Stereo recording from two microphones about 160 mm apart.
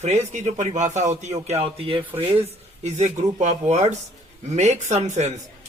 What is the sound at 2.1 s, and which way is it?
Speech, 15° right (ahead or behind).